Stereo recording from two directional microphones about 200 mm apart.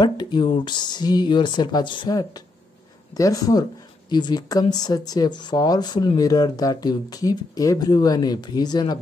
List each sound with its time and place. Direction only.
0.0 s speech: 20° left (ahead or behind)